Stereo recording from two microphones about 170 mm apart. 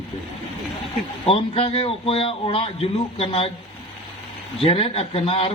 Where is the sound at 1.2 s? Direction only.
35° left (ahead or behind).